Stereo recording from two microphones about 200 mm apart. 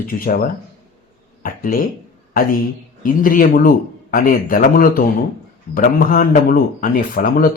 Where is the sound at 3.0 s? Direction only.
45° left (ahead or behind).